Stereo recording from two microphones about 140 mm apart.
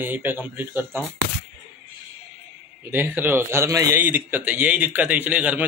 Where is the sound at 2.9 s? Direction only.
15° right (ahead or behind).